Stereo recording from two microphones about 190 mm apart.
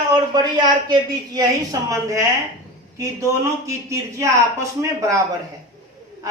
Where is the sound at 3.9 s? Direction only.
15° right (ahead or behind).